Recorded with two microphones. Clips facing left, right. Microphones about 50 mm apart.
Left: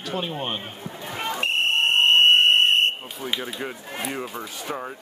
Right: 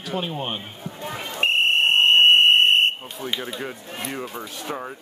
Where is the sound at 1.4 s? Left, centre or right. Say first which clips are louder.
Right 4 dB; right.